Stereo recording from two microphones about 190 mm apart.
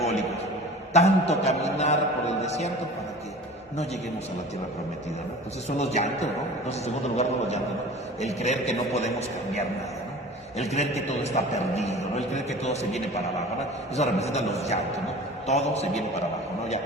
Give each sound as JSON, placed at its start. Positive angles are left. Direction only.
{"t": 0.9, "sound": "a man's voice", "side_deg": 35}
{"t": 5.6, "sound": "a man's voice", "side_deg": 35}
{"t": 10.7, "sound": "a man's voice", "side_deg": 35}
{"t": 13.9, "sound": "a man's voice", "side_deg": 35}